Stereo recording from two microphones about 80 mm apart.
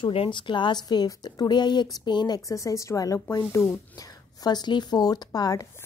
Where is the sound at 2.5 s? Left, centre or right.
Left.